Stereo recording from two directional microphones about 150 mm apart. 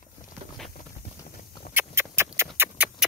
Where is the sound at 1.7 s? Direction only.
15° right (ahead or behind).